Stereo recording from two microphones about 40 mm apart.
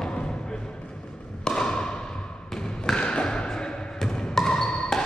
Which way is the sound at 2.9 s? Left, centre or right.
Left.